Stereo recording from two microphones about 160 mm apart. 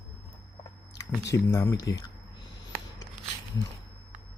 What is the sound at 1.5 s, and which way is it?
Speech, 15° left (ahead or behind).